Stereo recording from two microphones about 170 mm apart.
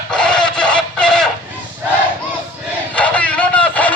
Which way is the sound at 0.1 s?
5° left (ahead or behind).